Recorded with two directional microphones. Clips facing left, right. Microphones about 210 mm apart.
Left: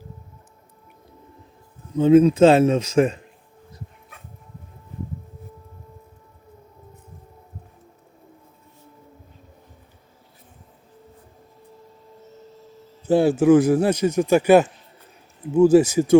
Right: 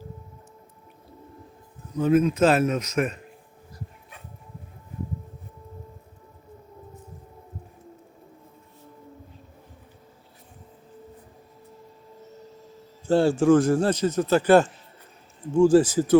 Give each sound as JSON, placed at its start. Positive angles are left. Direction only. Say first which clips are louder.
{"t": 2.0, "sound": "a man's voice", "louder": "left 7 dB", "side_deg": 25}
{"t": 13.1, "sound": "a man's voice", "louder": "left 3 dB", "side_deg": 15}